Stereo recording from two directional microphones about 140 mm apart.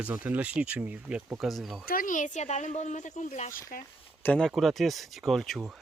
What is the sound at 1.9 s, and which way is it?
Speech, 80° left.